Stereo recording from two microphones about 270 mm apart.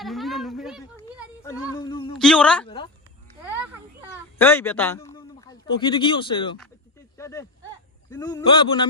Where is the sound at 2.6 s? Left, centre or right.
Centre.